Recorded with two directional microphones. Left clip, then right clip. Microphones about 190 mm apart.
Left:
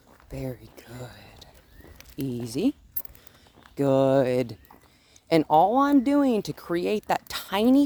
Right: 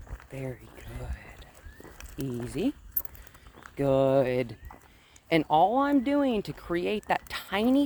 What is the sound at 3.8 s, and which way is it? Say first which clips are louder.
Speech: left 3 dB; 40° left (ahead or behind).